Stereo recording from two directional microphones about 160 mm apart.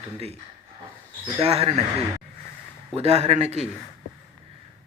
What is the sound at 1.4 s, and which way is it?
Speech, 40° right (ahead or behind).